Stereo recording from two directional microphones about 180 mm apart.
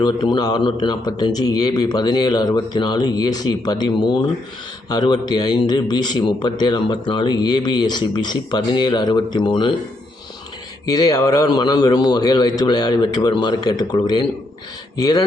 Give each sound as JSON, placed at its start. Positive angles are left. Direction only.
{"t": 0.0, "sound": "a man's voice", "side_deg": 25}
{"t": 10.8, "sound": "a man's voice", "side_deg": 20}